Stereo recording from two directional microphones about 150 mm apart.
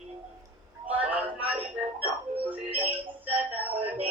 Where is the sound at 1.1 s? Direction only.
10° right (ahead or behind).